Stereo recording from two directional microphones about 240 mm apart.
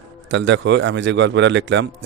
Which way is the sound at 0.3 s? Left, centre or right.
Right.